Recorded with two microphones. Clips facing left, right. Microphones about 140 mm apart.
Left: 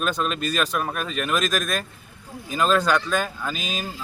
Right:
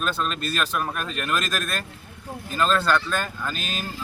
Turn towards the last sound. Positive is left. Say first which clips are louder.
# left 1 dB
turn(degrees=0)  # may be behind; listen again after turning